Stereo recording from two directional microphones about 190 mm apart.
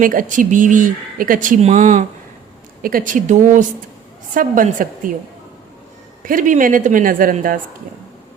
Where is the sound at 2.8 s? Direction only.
50° right (ahead or behind).